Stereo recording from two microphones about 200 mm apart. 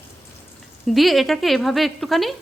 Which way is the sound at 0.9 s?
Centre (ahead or behind).